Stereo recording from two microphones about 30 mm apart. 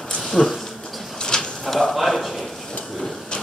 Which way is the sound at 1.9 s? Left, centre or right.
Centre.